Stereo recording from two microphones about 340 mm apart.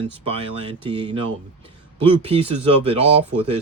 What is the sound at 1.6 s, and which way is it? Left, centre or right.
Speech, centre.